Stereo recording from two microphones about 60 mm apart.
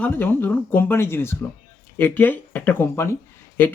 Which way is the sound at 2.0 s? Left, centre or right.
Left.